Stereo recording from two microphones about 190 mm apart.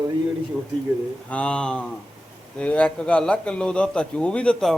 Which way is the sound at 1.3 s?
5° left (ahead or behind).